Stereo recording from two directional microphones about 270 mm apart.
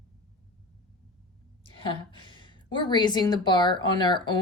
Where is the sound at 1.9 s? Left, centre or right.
Centre.